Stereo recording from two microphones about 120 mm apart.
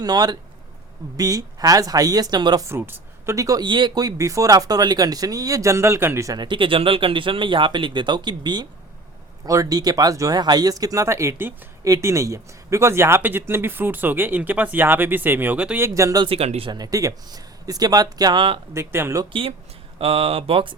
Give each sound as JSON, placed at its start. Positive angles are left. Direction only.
{"t": 0.0, "sound": "speech", "side_deg": -35}
{"t": 2.6, "sound": "speech", "side_deg": -20}
{"t": 15.8, "sound": "speech", "side_deg": -25}
{"t": 16.2, "sound": "speech", "side_deg": -55}
{"t": 16.6, "sound": "speech", "side_deg": -35}
{"t": 18.7, "sound": "speech", "side_deg": -20}
{"t": 19.2, "sound": "speech", "side_deg": -45}